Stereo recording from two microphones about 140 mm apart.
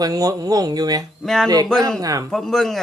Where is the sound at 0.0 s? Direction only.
25° right (ahead or behind).